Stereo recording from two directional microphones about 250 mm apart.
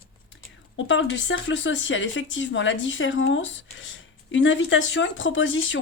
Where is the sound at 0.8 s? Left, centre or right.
Left.